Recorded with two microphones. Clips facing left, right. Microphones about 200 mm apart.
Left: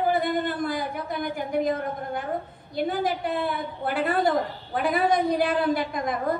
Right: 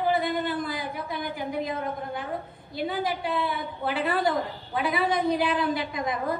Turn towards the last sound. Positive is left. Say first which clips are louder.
# left 3 dB
turn(degrees=50)  # may be behind; listen again after turning